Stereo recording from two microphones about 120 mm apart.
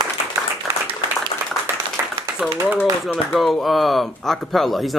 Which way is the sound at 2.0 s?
15° right (ahead or behind).